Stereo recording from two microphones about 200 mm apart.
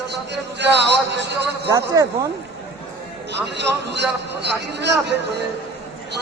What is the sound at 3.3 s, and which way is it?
A man's voice, 60° right (ahead or behind).